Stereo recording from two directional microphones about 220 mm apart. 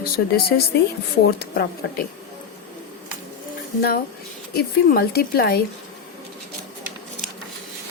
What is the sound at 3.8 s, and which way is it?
Speech, 45° left (ahead or behind).